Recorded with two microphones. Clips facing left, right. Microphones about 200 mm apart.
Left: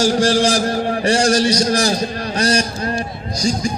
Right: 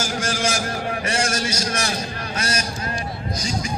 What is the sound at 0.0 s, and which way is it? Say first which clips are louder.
A man's voice: left 10 dB; 35° left (ahead or behind).